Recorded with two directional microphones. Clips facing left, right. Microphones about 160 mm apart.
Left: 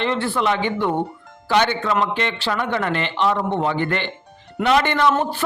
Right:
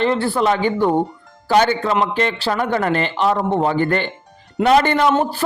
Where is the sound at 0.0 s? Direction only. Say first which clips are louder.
Right 4 dB; 40° right (ahead or behind).